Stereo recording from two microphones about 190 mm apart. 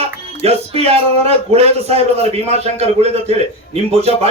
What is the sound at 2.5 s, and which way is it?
Speech, 35° right (ahead or behind).